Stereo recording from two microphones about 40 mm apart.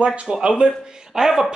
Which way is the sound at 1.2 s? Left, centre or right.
Centre.